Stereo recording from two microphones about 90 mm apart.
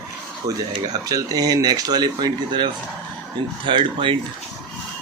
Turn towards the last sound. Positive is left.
turn(degrees=-70)  # may be behind; listen again after turning